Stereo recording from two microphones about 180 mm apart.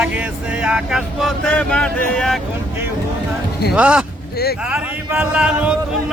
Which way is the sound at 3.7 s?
5° right (ahead or behind).